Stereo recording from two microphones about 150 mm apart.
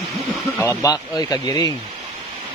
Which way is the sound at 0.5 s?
20° left (ahead or behind).